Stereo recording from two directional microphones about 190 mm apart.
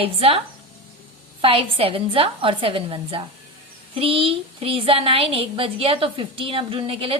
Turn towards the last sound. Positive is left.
turn(degrees=-30)  # may be behind; listen again after turning